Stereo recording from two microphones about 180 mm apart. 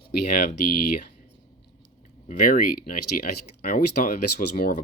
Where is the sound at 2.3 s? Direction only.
50° left (ahead or behind).